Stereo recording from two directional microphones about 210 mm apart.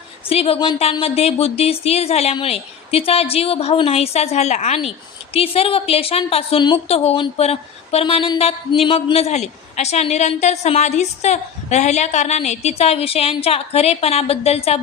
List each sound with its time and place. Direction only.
0.3 s a woman's voice: 30° left (ahead or behind)